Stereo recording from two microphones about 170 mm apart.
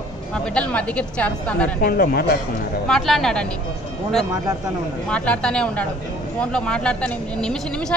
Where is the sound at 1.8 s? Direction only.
60° left (ahead or behind).